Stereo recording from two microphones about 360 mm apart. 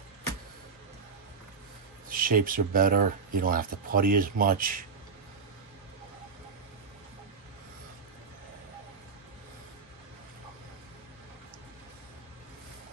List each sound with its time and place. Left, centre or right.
2.0 s speech: right